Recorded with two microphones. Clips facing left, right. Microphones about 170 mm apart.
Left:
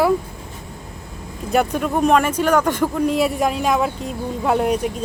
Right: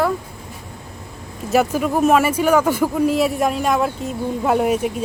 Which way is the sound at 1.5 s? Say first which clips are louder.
Right 1 dB; 5° right (ahead or behind).